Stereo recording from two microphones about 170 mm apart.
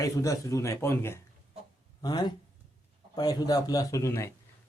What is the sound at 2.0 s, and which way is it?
A man's voice, 25° left (ahead or behind).